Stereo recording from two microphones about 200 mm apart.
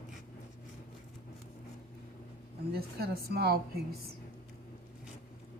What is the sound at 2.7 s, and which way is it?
A woman's voice, 50° right (ahead or behind).